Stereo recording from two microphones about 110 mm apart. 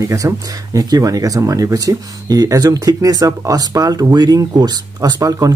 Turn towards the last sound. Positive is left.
turn(degrees=-35)  # may be behind; listen again after turning